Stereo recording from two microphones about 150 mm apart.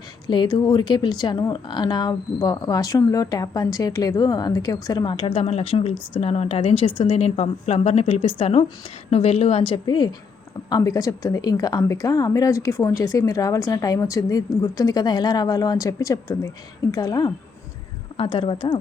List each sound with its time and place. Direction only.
0.3 s a woman's voice: 30° left (ahead or behind)